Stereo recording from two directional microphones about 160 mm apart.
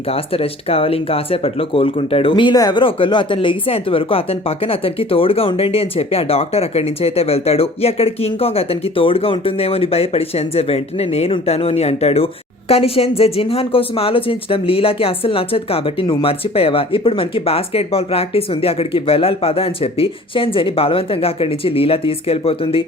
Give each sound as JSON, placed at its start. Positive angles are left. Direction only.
{"t": 0.1, "sound": "speech", "side_deg": 35}